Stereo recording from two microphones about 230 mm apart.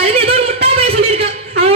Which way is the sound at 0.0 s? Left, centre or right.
Right.